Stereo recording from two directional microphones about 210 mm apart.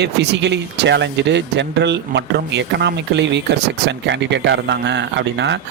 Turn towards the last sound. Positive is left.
turn(degrees=-55)  # may be behind; listen again after turning